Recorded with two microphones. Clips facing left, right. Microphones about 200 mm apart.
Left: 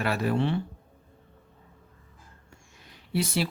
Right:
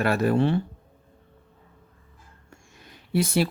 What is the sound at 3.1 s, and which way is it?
Speech, 50° right (ahead or behind).